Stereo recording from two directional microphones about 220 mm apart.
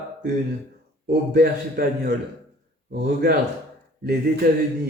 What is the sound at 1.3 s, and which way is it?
A man's voice, 45° right (ahead or behind).